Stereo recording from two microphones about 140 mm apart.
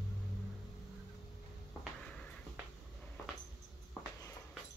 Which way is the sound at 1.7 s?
5° left (ahead or behind).